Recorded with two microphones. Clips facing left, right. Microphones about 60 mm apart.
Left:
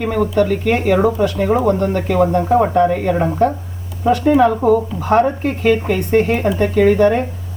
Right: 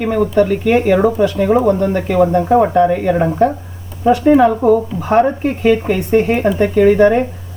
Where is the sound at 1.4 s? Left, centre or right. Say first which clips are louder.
Right 3 dB; centre.